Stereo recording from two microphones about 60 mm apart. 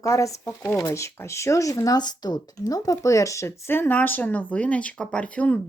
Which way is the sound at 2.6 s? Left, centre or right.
Left.